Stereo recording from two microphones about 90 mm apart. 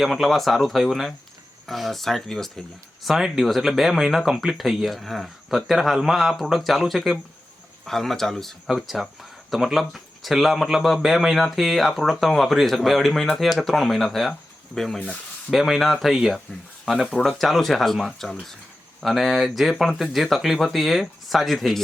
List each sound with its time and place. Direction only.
0.0 s speech: centre (ahead or behind)